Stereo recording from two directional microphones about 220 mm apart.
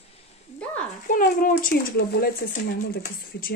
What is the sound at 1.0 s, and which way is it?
Speech, 40° left (ahead or behind).